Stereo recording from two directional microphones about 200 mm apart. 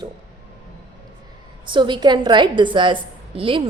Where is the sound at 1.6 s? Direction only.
25° right (ahead or behind).